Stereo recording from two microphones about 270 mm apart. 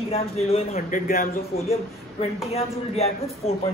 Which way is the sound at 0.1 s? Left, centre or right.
Left.